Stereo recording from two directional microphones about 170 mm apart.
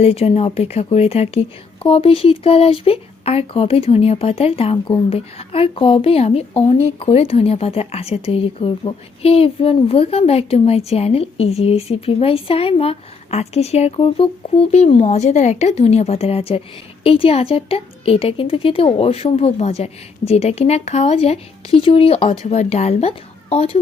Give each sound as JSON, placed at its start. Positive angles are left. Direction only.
{"t": 0.0, "sound": "speech", "side_deg": 35}